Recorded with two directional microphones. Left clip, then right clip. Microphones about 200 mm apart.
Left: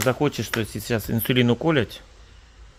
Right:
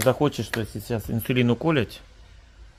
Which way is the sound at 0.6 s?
15° left (ahead or behind).